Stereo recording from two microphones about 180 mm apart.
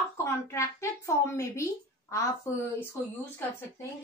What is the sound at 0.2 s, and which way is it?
A woman's voice, 15° left (ahead or behind).